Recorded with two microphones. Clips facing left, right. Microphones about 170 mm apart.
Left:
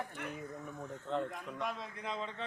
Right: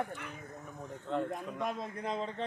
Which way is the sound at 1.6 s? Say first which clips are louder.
Right 3 dB; 45° right (ahead or behind).